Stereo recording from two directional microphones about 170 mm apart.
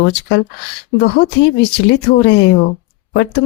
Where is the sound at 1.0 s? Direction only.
90° left.